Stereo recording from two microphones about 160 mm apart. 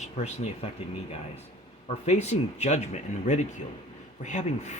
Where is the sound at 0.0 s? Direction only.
45° left (ahead or behind).